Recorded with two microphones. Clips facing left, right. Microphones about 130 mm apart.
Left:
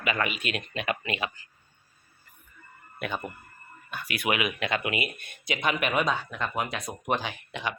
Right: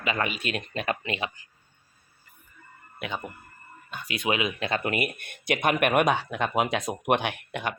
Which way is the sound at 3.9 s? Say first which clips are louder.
Right 1 dB; 20° right (ahead or behind).